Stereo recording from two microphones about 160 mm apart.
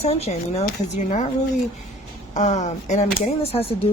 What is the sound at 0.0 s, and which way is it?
Speech, 40° left (ahead or behind).